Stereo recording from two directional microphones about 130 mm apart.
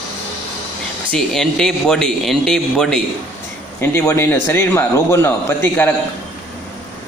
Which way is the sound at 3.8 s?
20° left (ahead or behind).